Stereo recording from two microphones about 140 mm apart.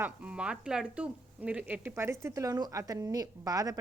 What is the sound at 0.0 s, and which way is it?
A woman's voice, 10° right (ahead or behind).